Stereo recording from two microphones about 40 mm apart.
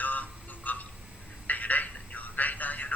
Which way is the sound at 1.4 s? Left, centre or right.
Left.